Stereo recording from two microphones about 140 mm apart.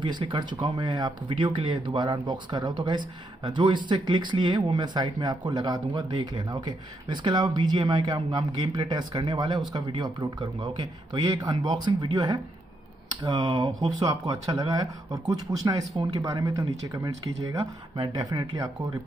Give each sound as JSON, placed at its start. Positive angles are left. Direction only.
{"t": 0.0, "sound": "speech", "side_deg": -35}